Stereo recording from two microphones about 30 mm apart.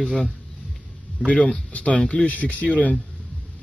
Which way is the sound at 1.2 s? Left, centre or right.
Left.